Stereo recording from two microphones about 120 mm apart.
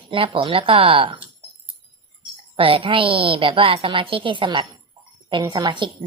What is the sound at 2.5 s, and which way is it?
A woman's voice, 50° right (ahead or behind).